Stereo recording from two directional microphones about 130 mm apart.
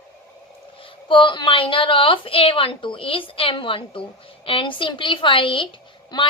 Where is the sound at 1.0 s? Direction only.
40° left (ahead or behind).